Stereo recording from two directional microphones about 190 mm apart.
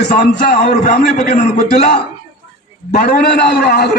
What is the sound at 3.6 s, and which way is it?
Speech, 55° left (ahead or behind).